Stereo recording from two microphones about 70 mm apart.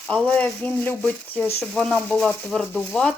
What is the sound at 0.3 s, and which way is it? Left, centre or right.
Speech, left.